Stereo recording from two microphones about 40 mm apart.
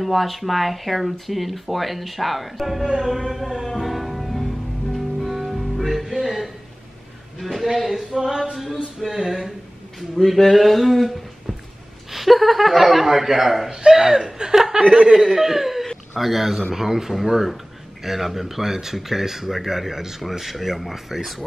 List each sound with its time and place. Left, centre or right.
0.0 s speech: centre
3.6 s music: centre
7.3 s a sound: centre
9.0 s speech: centre
13.7 s speech: centre
15.3 s speech: centre